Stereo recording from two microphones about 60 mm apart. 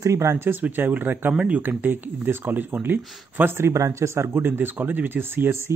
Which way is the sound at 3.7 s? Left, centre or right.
Right.